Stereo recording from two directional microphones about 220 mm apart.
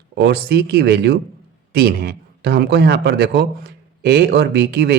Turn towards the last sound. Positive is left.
turn(degrees=-50)  # may be behind; listen again after turning